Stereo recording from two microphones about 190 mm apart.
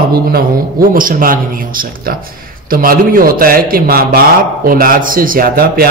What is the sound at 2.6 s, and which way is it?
A man's voice, 50° right (ahead or behind).